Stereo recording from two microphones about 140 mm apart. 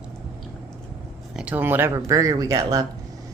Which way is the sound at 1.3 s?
10° right (ahead or behind).